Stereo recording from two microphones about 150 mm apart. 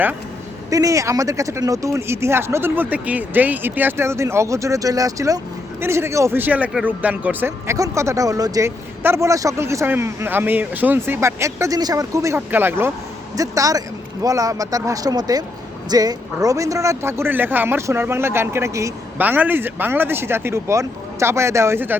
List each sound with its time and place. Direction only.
0.7 s speech: 20° right (ahead or behind)